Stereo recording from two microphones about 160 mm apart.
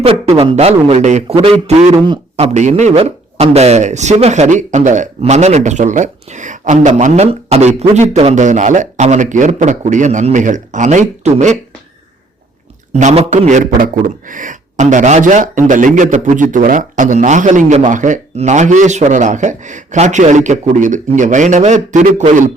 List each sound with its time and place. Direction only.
0.0 s a man's voice: 35° right (ahead or behind)
13.0 s speech: 45° right (ahead or behind)